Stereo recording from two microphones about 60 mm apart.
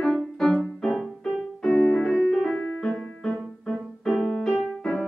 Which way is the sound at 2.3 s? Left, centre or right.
Centre.